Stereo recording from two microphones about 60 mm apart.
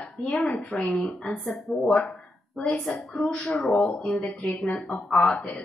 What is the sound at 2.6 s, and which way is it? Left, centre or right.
Speech, left.